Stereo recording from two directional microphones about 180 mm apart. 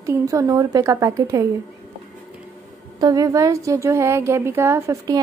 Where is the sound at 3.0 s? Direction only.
20° right (ahead or behind).